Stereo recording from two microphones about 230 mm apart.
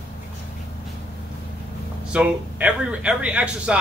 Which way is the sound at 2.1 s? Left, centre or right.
Centre.